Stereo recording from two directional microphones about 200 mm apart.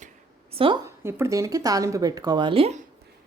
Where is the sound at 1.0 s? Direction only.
10° right (ahead or behind).